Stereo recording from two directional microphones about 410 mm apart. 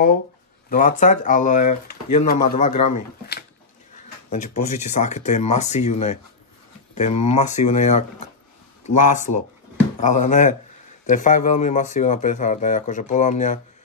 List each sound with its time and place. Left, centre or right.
0.7 s speech: centre
4.3 s speech: centre